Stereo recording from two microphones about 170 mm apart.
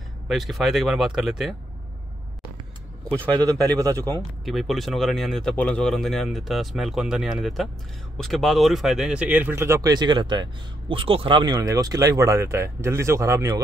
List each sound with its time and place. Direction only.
0.3 s speech: centre (ahead or behind)
3.1 s speech: 10° left (ahead or behind)
3.7 s speech: 20° right (ahead or behind)
4.5 s speech: centre (ahead or behind); by 13.6 s 20° right (ahead or behind)